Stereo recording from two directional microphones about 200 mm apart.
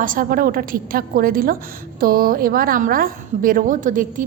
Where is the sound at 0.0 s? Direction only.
45° right (ahead or behind).